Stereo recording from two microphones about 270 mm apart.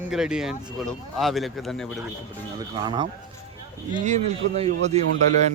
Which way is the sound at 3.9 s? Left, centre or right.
Right.